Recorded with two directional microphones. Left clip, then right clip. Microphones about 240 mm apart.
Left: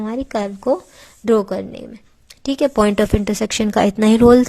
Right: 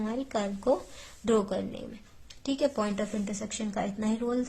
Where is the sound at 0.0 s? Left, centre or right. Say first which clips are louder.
Left 10 dB; left.